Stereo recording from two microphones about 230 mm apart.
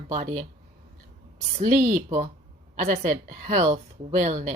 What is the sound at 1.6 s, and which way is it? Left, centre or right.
Speech, right.